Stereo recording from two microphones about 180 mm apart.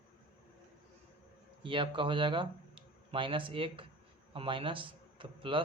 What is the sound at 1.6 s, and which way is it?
A man's voice, 30° right (ahead or behind).